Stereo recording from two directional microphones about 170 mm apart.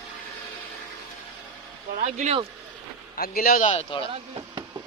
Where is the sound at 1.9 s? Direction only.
45° right (ahead or behind).